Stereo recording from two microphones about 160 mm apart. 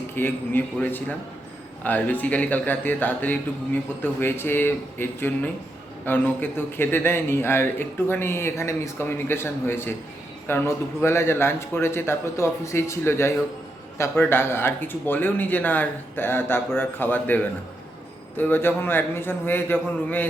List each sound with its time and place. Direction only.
0.2 s a man's voice: 10° left (ahead or behind)